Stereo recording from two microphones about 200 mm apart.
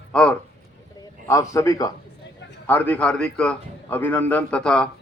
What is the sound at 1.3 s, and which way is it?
A man's voice, 15° left (ahead or behind).